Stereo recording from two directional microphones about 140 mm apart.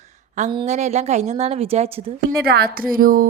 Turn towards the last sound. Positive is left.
turn(degrees=-85)